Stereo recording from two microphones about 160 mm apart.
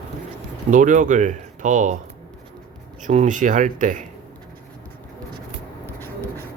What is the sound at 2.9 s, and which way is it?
Speech, 50° right (ahead or behind).